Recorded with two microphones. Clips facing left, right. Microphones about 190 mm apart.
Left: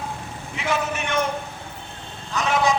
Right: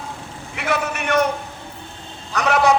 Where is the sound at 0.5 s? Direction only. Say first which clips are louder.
Right 2 dB; 65° right (ahead or behind).